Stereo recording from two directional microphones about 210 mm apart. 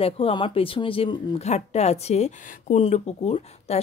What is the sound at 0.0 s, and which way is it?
Speech, 25° left (ahead or behind).